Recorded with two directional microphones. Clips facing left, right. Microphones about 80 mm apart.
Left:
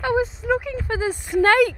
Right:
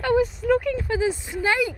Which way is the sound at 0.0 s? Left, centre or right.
Left.